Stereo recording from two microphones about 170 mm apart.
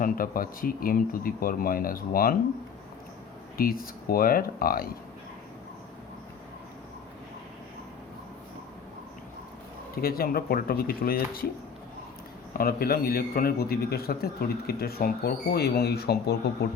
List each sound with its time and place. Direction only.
0.0 s speech: 55° left (ahead or behind)
3.6 s speech: 60° left (ahead or behind)
9.9 s speech: 60° left (ahead or behind)
12.5 s speech: 60° left (ahead or behind)